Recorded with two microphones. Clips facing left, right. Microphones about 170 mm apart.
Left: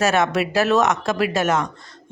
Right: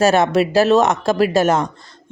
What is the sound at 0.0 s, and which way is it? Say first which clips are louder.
Speech: right 5 dB; 30° right (ahead or behind).